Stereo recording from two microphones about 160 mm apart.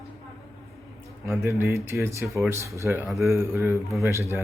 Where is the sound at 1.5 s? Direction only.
15° right (ahead or behind).